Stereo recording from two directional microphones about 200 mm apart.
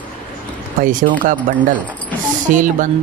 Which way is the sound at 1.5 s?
40° right (ahead or behind).